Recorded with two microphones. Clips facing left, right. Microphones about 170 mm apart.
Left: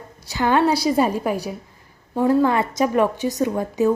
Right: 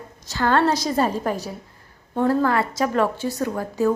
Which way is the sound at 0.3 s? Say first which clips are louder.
Left 1 dB; 15° left (ahead or behind).